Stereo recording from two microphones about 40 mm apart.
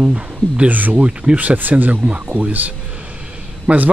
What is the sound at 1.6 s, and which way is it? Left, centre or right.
Speech, right.